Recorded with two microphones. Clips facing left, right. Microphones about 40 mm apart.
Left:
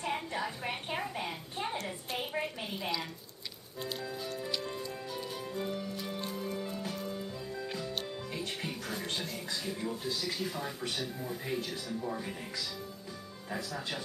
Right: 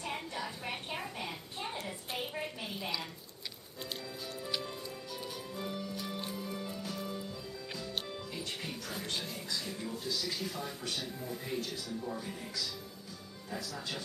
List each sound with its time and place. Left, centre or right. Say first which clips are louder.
0.1 s a sound: left 4 dB; centre
5.5 s music: left 3 dB; centre
9.7 s speech: left 4 dB; centre
10.0 s speech: right 1 dB; left